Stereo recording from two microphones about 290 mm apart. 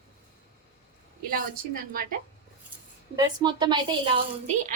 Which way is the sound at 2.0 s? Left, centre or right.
Right.